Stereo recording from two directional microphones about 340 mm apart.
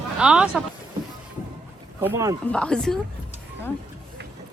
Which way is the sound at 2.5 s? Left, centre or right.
Centre.